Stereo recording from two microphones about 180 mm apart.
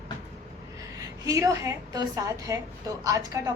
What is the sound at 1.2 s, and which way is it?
A woman's voice, 20° right (ahead or behind).